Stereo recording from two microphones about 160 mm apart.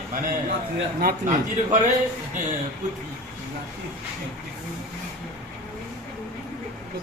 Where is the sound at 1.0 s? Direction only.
60° right (ahead or behind).